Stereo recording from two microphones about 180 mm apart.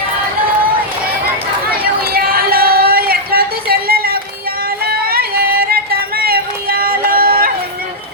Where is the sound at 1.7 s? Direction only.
55° right (ahead or behind).